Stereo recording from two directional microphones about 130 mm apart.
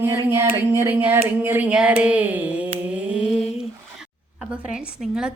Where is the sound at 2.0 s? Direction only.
10° right (ahead or behind).